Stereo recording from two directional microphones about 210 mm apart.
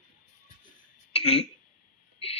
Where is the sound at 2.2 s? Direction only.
30° left (ahead or behind).